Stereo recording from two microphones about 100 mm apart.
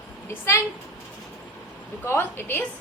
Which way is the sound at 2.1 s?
20° left (ahead or behind).